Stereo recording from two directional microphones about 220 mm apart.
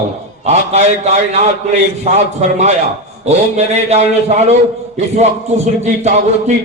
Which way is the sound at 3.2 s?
30° right (ahead or behind).